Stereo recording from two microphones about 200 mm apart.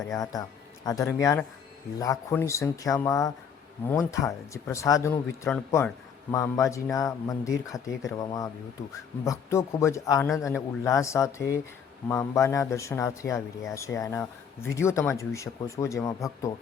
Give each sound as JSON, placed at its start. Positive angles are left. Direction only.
{"t": 0.9, "sound": "a man's voice", "side_deg": 15}